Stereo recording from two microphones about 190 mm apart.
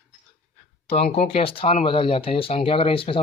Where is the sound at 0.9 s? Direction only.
30° left (ahead or behind).